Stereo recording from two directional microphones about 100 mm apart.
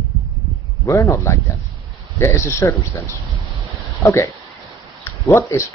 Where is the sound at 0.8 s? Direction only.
30° left (ahead or behind).